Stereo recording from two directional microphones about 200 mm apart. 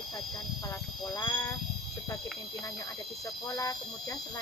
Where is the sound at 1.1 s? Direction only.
15° left (ahead or behind).